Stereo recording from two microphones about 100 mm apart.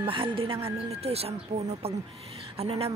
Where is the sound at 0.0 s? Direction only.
60° right (ahead or behind).